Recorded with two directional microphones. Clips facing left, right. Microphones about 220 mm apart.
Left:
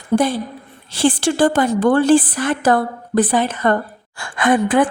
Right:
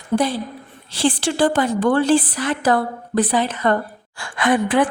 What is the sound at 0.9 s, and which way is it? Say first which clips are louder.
A woman's voice: left 3 dB; 50° left (ahead or behind).